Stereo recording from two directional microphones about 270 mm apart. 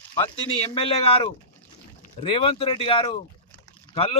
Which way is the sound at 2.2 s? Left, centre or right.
Centre.